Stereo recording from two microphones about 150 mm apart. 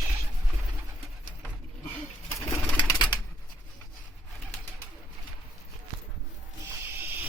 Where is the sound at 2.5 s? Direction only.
30° left (ahead or behind).